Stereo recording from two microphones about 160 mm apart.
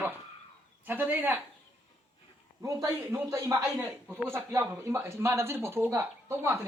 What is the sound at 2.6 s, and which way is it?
A woman's voice, 20° right (ahead or behind).